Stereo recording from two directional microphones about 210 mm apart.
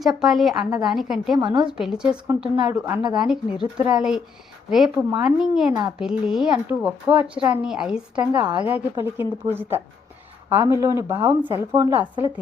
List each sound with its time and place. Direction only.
0.0 s a woman's voice: centre (ahead or behind)
1.4 s a woman's voice: 20° right (ahead or behind)
1.8 s a woman's voice: 5° right (ahead or behind)
2.8 s a woman's voice: 20° right (ahead or behind)
3.2 s a woman's voice: 5° right (ahead or behind)